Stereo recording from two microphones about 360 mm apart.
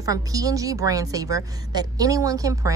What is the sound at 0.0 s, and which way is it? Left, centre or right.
Speech, centre.